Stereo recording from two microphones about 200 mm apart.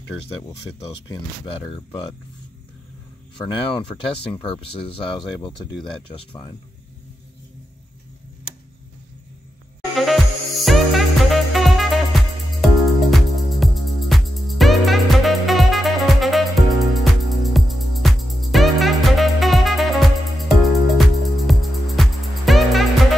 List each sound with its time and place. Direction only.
1.0 s speech: 20° left (ahead or behind)
3.7 s speech: 25° left (ahead or behind)
9.9 s music: centre (ahead or behind)